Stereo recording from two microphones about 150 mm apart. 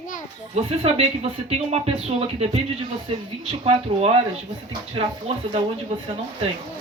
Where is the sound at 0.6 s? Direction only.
45° right (ahead or behind).